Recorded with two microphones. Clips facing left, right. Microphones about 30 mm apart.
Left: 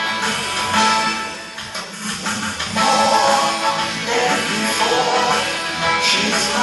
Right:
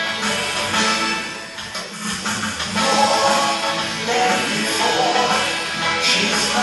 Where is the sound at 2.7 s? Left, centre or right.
Centre.